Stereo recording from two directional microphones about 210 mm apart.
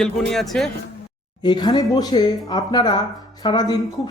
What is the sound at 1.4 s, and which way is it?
Speech, 20° left (ahead or behind).